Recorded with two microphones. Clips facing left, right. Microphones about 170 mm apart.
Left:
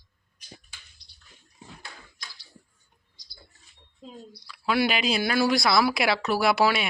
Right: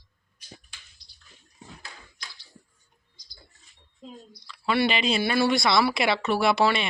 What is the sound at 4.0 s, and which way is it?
A woman's voice, centre (ahead or behind).